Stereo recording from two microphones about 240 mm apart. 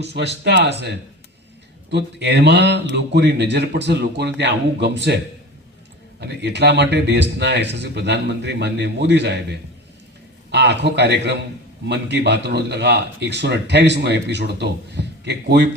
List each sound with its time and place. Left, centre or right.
0.0 s speech: right